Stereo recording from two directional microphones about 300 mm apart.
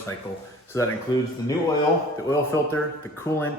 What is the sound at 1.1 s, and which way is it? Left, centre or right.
Speech, centre.